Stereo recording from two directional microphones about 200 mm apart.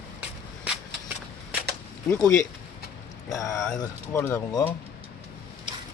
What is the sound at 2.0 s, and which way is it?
Speech, 15° left (ahead or behind).